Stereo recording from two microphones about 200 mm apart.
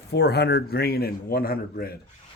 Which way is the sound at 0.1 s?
55° left (ahead or behind).